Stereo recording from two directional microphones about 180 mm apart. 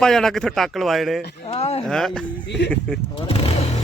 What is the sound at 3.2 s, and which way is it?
Speech, 30° left (ahead or behind).